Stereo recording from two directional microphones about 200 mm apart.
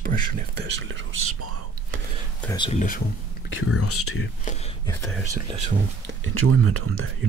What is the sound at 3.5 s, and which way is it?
Speech, 90° left.